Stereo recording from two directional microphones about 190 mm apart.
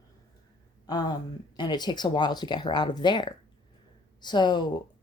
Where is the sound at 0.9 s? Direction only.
20° left (ahead or behind).